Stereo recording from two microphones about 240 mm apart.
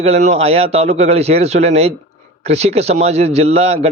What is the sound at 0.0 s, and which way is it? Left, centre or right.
A man's voice, right.